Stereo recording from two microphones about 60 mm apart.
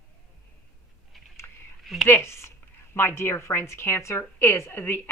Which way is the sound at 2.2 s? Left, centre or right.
Left.